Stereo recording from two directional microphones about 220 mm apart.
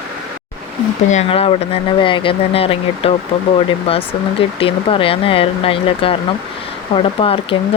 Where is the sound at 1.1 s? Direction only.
30° left (ahead or behind).